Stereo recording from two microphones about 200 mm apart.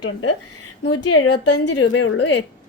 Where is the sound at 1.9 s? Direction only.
60° left (ahead or behind).